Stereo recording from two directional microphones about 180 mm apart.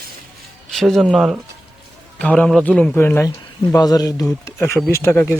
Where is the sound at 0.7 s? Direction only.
Centre (ahead or behind).